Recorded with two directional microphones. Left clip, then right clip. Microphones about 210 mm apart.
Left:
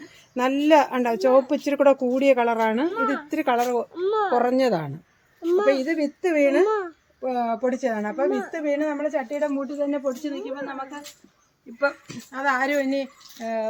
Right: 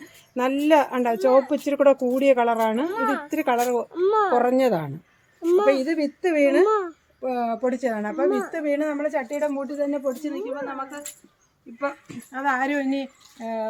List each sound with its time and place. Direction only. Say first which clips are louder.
0.0 s a woman's voice: even; 5° left (ahead or behind)
2.9 s speech: even; 30° right (ahead or behind)
3.2 s speech: even; centre (ahead or behind)
3.9 s speech: right 5 dB; 30° right (ahead or behind)
4.4 s speech: right 1 dB; 5° right (ahead or behind)
5.4 s a woman's voice: right 2 dB; 20° right (ahead or behind)
5.6 s speech: right 1 dB; 5° right (ahead or behind)
6.7 s speech: right 2 dB; 20° right (ahead or behind)
7.2 s speech: even; centre (ahead or behind)
11.8 s speech: left 4 dB; 35° left (ahead or behind)